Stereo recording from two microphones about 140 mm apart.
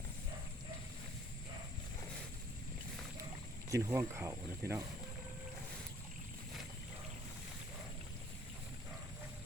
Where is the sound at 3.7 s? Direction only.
20° right (ahead or behind).